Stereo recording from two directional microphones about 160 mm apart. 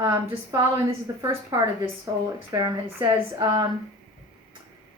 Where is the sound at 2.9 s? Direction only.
25° right (ahead or behind).